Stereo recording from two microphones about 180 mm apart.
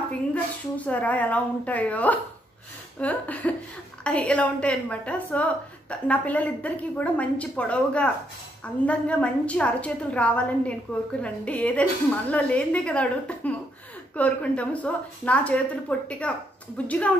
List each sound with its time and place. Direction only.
0.3 s a woman's voice: 10° left (ahead or behind)